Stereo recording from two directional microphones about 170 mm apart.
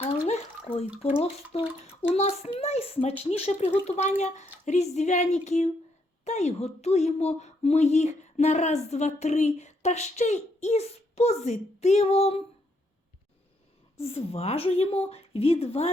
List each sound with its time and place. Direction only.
0.0 s bathtub: 35° left (ahead or behind)
1.5 s speech: 35° left (ahead or behind)
4.2 s music: 45° left (ahead or behind)
6.2 s speech: 40° left (ahead or behind)
14.0 s speech: 35° left (ahead or behind)